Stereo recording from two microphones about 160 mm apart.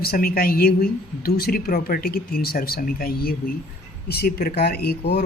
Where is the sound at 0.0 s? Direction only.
70° left (ahead or behind).